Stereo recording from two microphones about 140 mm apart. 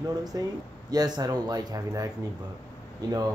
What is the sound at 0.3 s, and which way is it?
Speech, 25° right (ahead or behind).